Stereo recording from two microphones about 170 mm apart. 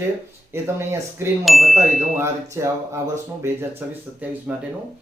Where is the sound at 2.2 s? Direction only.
15° right (ahead or behind).